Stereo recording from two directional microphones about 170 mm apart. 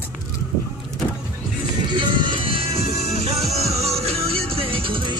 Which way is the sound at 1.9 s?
25° right (ahead or behind).